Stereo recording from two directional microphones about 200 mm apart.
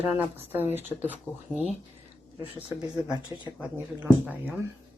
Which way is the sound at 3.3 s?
15° right (ahead or behind).